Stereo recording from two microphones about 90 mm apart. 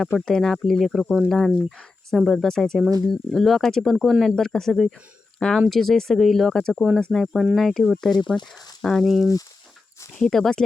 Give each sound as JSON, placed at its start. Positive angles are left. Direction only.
{"t": 0.0, "sound": "speech", "side_deg": 5}
{"t": 8.4, "sound": "speech", "side_deg": 45}
{"t": 8.8, "sound": "speech", "side_deg": 5}